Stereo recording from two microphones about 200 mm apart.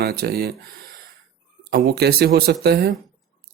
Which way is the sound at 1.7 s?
55° right (ahead or behind).